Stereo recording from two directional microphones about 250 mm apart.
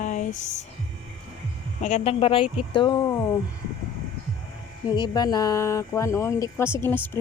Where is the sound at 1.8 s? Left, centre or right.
Left.